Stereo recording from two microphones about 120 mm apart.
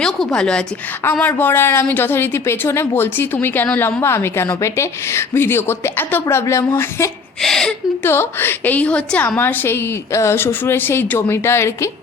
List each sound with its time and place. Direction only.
0.0 s a woman's voice: 5° left (ahead or behind)
1.2 s a woman's voice: 15° left (ahead or behind)
7.4 s a woman's voice: 5° left (ahead or behind)
8.0 s a woman's voice: 20° left (ahead or behind)